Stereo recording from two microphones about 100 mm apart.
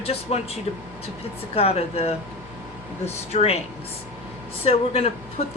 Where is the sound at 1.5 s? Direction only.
85° left.